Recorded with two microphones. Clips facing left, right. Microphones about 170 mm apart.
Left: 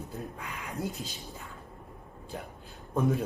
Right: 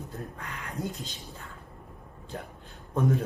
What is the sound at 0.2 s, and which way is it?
Speech, 5° left (ahead or behind).